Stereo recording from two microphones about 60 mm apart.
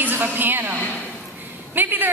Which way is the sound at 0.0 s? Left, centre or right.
Right.